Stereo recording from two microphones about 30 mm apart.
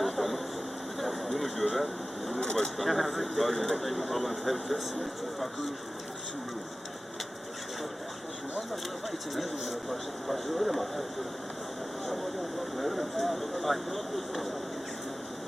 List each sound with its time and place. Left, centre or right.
0.0 s a sound: centre
1.7 s speech: centre
2.4 s speech: left
2.7 s speech: centre
9.3 s speech: centre
12.7 s speech: centre